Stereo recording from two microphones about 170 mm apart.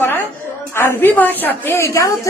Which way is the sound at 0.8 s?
15° left (ahead or behind).